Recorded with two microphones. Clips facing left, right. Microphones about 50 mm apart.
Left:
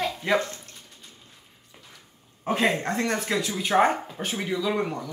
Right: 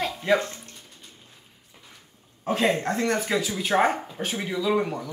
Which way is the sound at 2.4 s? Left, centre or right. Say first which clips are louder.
Right 1 dB; centre.